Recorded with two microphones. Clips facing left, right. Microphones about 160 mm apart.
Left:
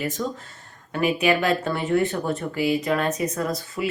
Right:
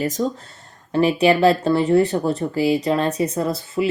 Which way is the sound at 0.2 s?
35° right (ahead or behind).